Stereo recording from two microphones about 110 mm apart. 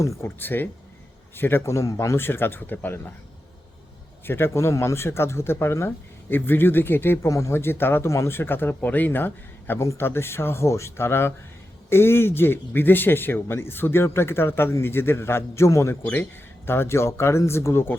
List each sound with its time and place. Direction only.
0.0 s speech: 25° left (ahead or behind)
4.3 s speech: 20° left (ahead or behind)